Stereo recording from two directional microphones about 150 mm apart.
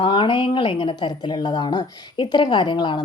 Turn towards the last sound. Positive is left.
turn(degrees=30)  # may be behind; listen again after turning